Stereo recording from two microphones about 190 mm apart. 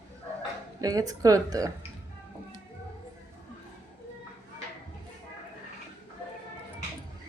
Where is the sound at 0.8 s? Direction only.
20° right (ahead or behind).